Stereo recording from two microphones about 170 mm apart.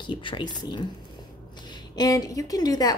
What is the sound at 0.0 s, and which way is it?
A woman's voice, 30° left (ahead or behind).